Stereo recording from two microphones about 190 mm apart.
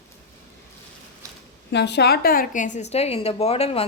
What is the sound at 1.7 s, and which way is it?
A woman's voice, 65° left (ahead or behind).